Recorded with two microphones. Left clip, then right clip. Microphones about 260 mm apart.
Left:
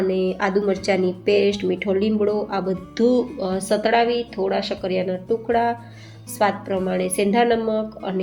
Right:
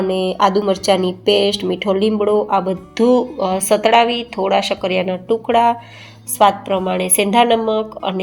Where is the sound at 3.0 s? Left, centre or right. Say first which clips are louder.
Right 5 dB; right.